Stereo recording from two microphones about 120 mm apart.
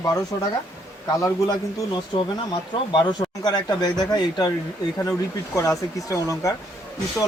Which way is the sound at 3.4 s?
35° left (ahead or behind).